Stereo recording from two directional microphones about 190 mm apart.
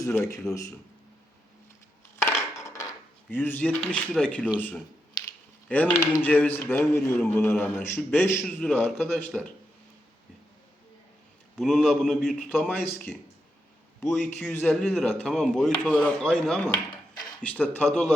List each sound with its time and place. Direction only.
0.0 s a man's voice: 15° left (ahead or behind)
2.2 s dishes: 15° left (ahead or behind)
4.1 s a man's voice: 5° left (ahead or behind)
5.2 s a sound: 20° left (ahead or behind)
5.6 s a man's voice: 10° left (ahead or behind)
11.5 s speech: centre (ahead or behind)